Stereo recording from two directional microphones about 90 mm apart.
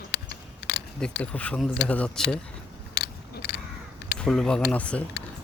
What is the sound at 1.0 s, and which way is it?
Speech, 15° left (ahead or behind).